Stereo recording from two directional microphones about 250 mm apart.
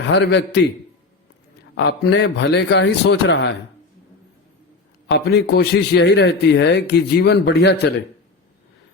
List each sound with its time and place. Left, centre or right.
0.1 s a man's voice: left
1.7 s a man's voice: left
5.0 s a man's voice: left